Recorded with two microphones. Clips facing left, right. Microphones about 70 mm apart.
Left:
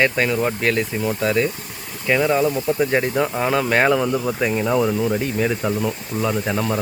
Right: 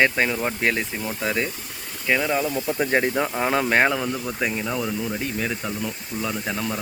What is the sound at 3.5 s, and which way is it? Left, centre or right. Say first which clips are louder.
Speech: left 1 dB; centre.